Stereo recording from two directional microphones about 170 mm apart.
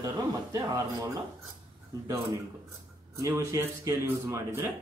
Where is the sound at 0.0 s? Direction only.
20° right (ahead or behind).